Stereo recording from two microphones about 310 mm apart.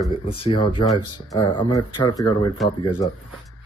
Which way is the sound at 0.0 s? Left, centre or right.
Centre.